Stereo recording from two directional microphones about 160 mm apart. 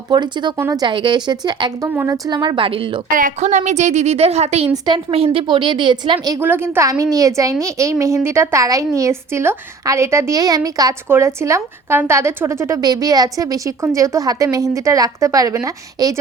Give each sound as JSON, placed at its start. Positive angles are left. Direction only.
{"t": 0.1, "sound": "a woman's voice", "side_deg": -30}
{"t": 1.9, "sound": "a woman's voice", "side_deg": -15}
{"t": 3.1, "sound": "a woman's voice", "side_deg": -55}
{"t": 6.4, "sound": "a woman's voice", "side_deg": -15}